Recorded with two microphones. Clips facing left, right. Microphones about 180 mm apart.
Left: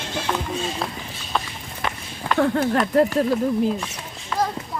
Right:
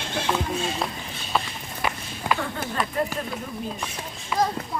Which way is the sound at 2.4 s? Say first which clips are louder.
Left 11 dB; 70° left (ahead or behind).